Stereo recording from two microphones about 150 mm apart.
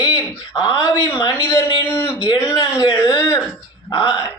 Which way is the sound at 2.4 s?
20° left (ahead or behind).